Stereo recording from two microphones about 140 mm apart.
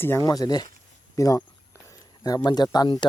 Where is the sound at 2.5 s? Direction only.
30° left (ahead or behind).